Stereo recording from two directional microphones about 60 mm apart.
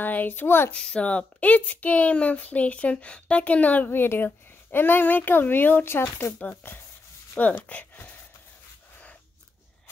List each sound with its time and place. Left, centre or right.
0.0 s a child's voice: left
0.7 s a woman's voice: centre; by 6.0 s left
7.6 s speech: left